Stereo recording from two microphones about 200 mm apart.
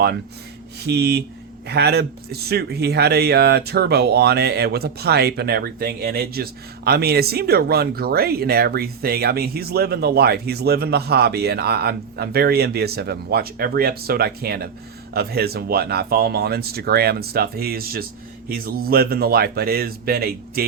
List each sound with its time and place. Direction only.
0.8 s speech: 55° right (ahead or behind)